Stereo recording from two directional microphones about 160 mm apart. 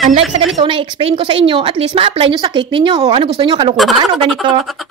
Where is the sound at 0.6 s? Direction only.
30° right (ahead or behind).